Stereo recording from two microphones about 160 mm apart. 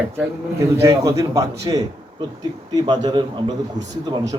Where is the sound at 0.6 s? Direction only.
20° right (ahead or behind).